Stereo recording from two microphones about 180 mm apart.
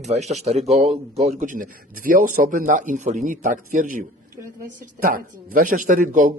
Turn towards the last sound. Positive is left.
turn(degrees=-45)  # may be behind; listen again after turning